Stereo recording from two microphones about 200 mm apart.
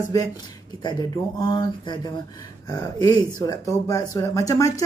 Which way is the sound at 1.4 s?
20° left (ahead or behind).